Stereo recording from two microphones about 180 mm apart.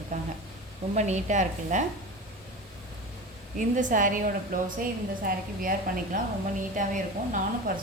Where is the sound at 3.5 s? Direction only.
45° right (ahead or behind).